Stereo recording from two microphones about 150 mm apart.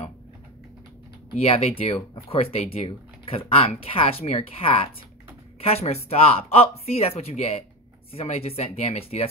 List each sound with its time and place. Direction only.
1.3 s speech: 45° left (ahead or behind)